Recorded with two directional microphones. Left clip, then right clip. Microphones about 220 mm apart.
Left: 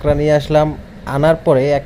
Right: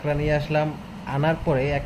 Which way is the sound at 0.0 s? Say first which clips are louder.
Left 10 dB; 35° left (ahead or behind).